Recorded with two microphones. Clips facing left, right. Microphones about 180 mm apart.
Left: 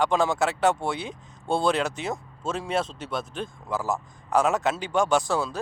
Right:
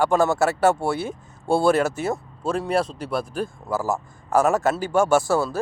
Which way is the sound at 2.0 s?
5° right (ahead or behind).